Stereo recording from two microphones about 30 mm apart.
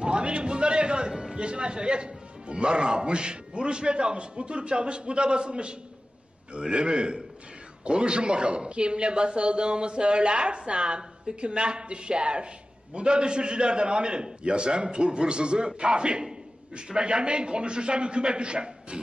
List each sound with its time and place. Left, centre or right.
0.0 s a man's voice: right